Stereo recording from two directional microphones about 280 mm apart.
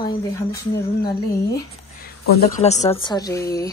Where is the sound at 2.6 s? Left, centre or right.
Left.